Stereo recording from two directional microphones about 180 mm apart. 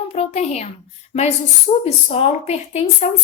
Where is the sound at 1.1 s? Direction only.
40° left (ahead or behind).